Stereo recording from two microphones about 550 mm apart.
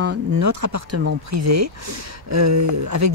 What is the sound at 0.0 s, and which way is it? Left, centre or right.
Speech, right.